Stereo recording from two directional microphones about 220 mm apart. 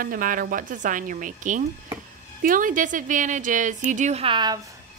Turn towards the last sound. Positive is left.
turn(degrees=-20)  # may be behind; listen again after turning